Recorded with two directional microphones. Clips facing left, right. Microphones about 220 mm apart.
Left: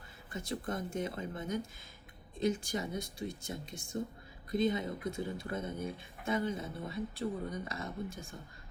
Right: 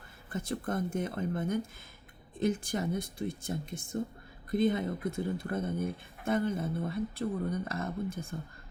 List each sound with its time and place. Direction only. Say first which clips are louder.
0.3 s speech: right 4 dB; 55° right (ahead or behind)